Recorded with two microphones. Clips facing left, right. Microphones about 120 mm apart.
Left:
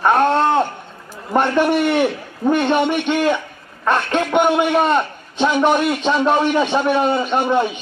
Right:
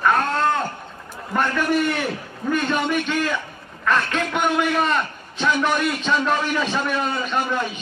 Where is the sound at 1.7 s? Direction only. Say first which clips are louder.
Left 5 dB; 40° right (ahead or behind).